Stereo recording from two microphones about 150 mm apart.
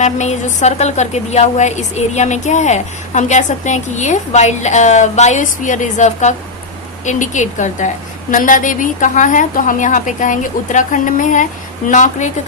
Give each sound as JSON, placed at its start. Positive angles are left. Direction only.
{"t": 0.0, "sound": "a woman's voice", "side_deg": 50}